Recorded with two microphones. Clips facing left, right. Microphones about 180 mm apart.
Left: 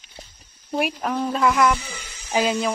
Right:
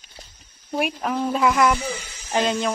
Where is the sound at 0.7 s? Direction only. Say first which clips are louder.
Even; centre (ahead or behind).